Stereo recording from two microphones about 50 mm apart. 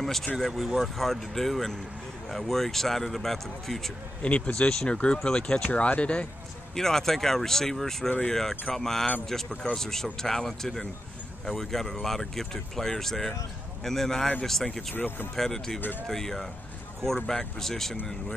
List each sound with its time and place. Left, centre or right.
0.0 s speech: centre
4.2 s speech: left
4.6 s speech: centre
6.7 s speech: centre
15.0 s speech: left
15.3 s speech: centre